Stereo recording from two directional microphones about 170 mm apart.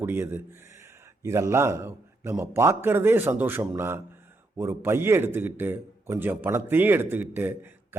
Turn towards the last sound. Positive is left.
turn(degrees=-15)  # may be behind; listen again after turning